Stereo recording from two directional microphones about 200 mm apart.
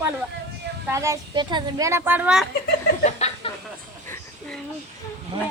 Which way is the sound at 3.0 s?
30° left (ahead or behind).